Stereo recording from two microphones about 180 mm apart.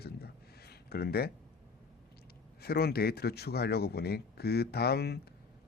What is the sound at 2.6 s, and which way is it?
A man's voice, 60° left (ahead or behind).